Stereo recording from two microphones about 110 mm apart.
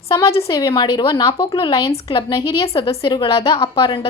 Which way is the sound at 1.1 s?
35° left (ahead or behind).